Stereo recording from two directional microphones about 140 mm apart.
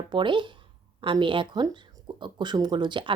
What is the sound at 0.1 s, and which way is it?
Speech, 35° right (ahead or behind).